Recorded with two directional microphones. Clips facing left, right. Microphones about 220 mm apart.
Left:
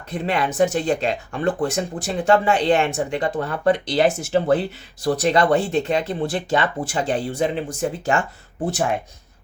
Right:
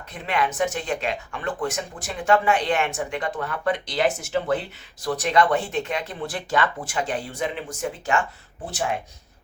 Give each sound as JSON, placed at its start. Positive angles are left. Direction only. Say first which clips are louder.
{"t": 0.1, "sound": "speech", "louder": "left 3 dB", "side_deg": 35}